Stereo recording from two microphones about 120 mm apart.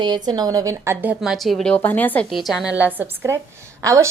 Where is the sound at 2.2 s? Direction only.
Centre (ahead or behind); by 4.0 s 25° right (ahead or behind).